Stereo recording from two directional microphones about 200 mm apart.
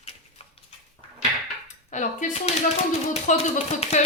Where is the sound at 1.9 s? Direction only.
35° left (ahead or behind).